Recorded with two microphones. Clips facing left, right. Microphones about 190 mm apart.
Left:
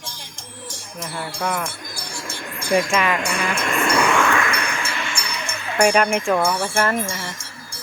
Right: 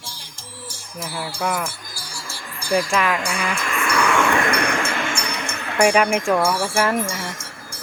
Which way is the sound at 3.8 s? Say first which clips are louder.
Left 1 dB; 20° left (ahead or behind).